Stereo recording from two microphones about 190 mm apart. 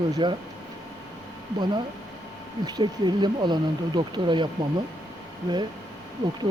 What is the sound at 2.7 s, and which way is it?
Speech, 20° right (ahead or behind).